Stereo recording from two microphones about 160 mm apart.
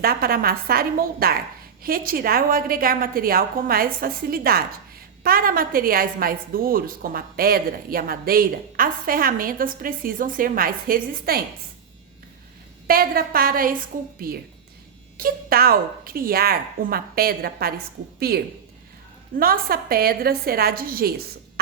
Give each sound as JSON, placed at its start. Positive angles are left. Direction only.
{"t": 0.0, "sound": "a woman's voice", "side_deg": -70}
{"t": 12.9, "sound": "a woman's voice", "side_deg": -65}
{"t": 19.4, "sound": "a woman's voice", "side_deg": -65}